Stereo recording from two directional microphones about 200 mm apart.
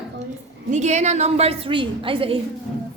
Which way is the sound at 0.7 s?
35° right (ahead or behind).